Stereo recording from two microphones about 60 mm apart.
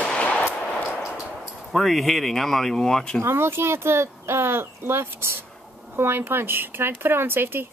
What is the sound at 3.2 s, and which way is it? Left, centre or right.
Speech, right.